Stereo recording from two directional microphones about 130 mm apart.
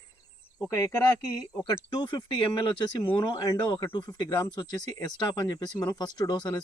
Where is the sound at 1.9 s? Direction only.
35° left (ahead or behind).